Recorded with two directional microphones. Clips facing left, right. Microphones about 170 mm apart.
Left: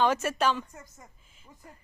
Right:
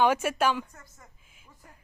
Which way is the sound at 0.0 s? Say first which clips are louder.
Right 1 dB; 10° right (ahead or behind).